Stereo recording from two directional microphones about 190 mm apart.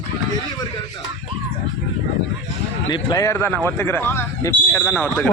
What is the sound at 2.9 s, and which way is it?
Speech, 25° left (ahead or behind).